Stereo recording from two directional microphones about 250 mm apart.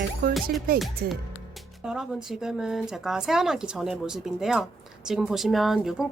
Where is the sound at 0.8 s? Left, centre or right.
Centre.